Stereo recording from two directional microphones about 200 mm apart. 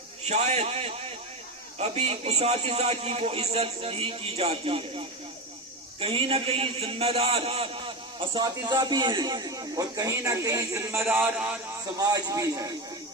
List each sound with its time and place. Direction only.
0.3 s a man's voice: 35° right (ahead or behind); by 12.7 s 15° right (ahead or behind)